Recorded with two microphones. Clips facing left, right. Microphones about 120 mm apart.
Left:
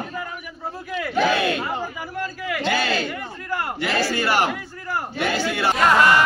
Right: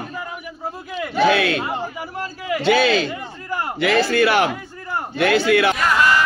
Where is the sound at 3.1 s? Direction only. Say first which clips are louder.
Right 1 dB; 20° right (ahead or behind).